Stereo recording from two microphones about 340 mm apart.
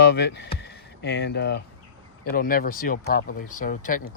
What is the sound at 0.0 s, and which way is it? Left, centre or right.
Speech, left.